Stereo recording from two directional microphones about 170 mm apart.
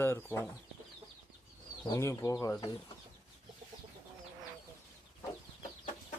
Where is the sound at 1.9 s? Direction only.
20° left (ahead or behind).